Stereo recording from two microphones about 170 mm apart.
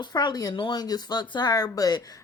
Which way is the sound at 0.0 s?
25° left (ahead or behind).